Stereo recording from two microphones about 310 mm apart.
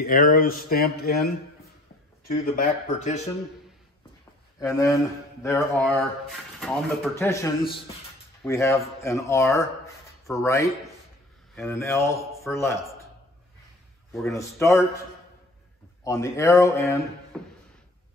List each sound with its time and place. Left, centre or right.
0.0 s a sound: left
4.6 s speech: centre
14.1 s speech: centre
16.0 s speech: centre